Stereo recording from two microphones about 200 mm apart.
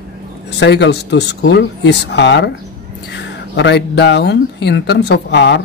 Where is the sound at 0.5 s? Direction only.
60° left (ahead or behind).